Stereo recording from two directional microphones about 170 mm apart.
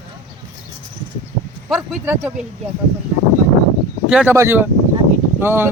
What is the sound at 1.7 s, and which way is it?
Speech, 10° right (ahead or behind).